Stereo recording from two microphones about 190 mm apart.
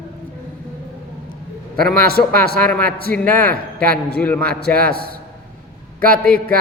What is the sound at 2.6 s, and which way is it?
Speech, 5° left (ahead or behind).